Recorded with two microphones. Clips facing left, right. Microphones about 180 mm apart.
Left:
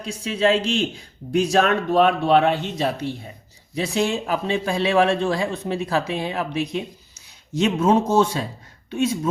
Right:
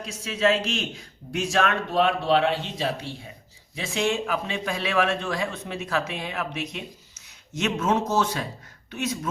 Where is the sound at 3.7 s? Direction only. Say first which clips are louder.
Left 3 dB; 35° left (ahead or behind).